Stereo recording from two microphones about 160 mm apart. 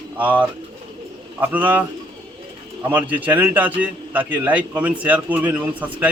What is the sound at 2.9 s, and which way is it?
A man's voice, 10° right (ahead or behind).